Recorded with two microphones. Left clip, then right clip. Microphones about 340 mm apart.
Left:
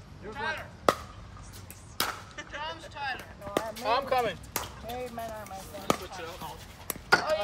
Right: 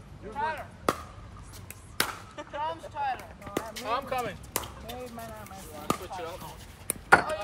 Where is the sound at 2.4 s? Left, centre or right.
Centre.